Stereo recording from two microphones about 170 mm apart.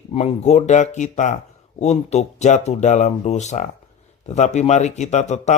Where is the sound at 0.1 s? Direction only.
40° left (ahead or behind).